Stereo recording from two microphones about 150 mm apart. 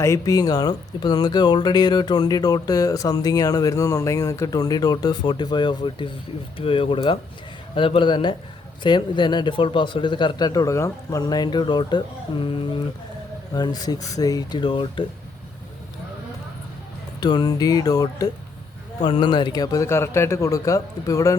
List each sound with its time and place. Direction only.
0.0 s speech: 20° left (ahead or behind)
17.2 s speech: 30° left (ahead or behind)